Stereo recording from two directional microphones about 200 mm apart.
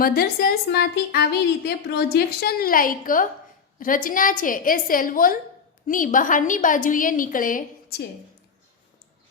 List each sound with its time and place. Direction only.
0.0 s a woman's voice: 50° left (ahead or behind)